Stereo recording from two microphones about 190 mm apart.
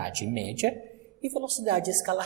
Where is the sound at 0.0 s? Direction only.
65° right (ahead or behind).